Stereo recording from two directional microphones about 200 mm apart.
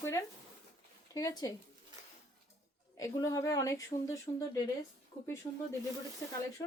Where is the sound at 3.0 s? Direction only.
15° left (ahead or behind).